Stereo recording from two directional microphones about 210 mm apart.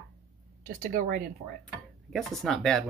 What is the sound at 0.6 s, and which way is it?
Speech, 40° right (ahead or behind).